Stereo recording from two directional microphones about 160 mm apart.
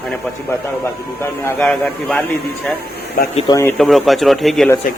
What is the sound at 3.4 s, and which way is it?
Speech, 20° left (ahead or behind).